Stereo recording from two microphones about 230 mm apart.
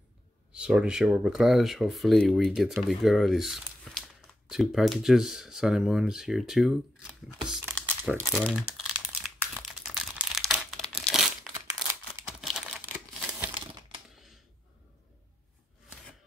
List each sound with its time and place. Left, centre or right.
0.5 s speech: centre
11.9 s crumpling: centre
12.4 s crumpling: centre
13.6 s crumpling: right
14.1 s computer keyboard: centre